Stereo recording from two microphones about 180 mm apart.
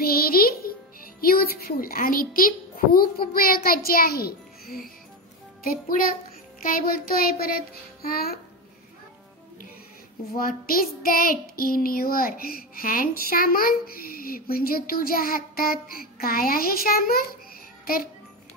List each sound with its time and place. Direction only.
0.0 s music: 55° left (ahead or behind)
1.2 s a child's voice: 55° left (ahead or behind)
5.6 s music: 55° left (ahead or behind)
6.6 s child singing: 50° left (ahead or behind)
10.3 s child singing: 55° left (ahead or behind)